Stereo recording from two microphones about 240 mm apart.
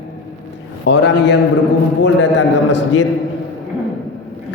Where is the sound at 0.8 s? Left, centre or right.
Left.